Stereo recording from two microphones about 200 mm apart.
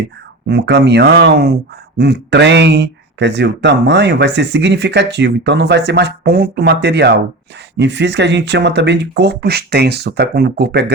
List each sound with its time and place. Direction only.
0.4 s speech: 55° right (ahead or behind)